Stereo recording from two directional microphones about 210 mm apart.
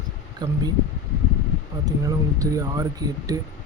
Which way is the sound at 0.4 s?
20° right (ahead or behind).